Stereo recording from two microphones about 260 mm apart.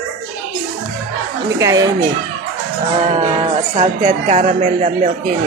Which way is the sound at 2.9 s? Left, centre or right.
Right.